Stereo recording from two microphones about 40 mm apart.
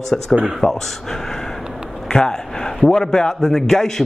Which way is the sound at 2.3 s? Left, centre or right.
Centre.